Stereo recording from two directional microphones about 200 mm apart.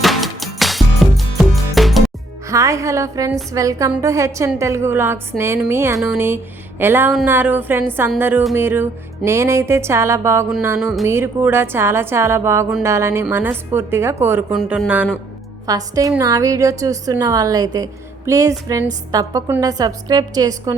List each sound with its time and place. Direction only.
0.0 s music: centre (ahead or behind)
2.5 s a woman's voice: 15° right (ahead or behind)